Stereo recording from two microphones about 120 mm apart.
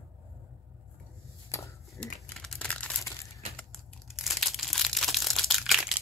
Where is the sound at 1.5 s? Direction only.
20° left (ahead or behind).